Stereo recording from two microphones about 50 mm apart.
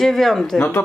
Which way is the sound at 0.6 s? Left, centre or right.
Left.